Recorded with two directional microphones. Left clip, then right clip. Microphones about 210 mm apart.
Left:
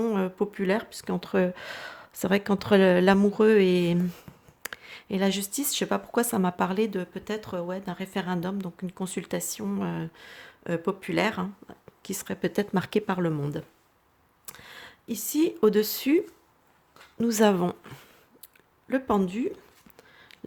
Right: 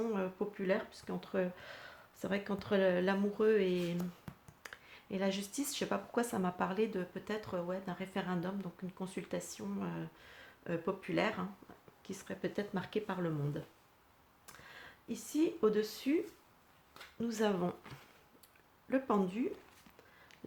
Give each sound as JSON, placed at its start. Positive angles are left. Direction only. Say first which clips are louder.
{"t": 0.0, "sound": "speech", "louder": "left 10 dB", "side_deg": 45}